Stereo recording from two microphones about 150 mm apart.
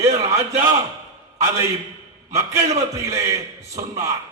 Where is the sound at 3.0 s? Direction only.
20° right (ahead or behind).